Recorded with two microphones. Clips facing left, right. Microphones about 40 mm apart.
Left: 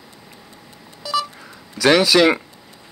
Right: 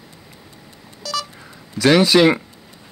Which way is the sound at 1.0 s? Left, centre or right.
Centre.